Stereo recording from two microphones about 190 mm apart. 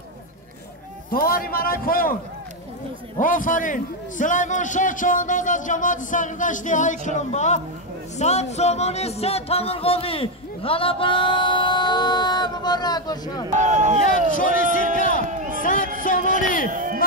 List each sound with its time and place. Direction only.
1.1 s a man's voice: 50° left (ahead or behind)
3.2 s a man's voice: 45° left (ahead or behind)
8.2 s music: 35° left (ahead or behind); by 13.5 s 20° left (ahead or behind)
13.6 s speech: 40° right (ahead or behind)
14.0 s a man's voice: 45° left (ahead or behind)
15.0 s run: 45° left (ahead or behind)
15.2 s a sound: 40° right (ahead or behind)
15.6 s music: 45° left (ahead or behind)
16.0 s a sound: 45° left (ahead or behind)
16.7 s a sound: 45° right (ahead or behind)